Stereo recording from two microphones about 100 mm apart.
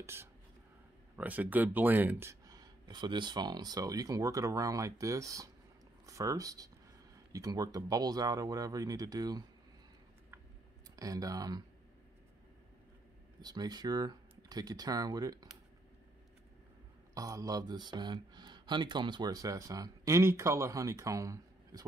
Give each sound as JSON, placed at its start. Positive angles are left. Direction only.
{"t": 0.0, "sound": "speech", "side_deg": -25}
{"t": 2.4, "sound": "speech", "side_deg": -40}
{"t": 11.0, "sound": "speech", "side_deg": -35}
{"t": 13.4, "sound": "speech", "side_deg": -40}
{"t": 17.1, "sound": "speech", "side_deg": -35}